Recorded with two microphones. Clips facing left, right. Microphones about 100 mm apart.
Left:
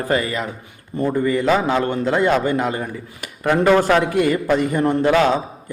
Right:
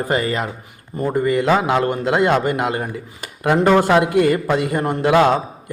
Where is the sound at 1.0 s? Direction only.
25° right (ahead or behind).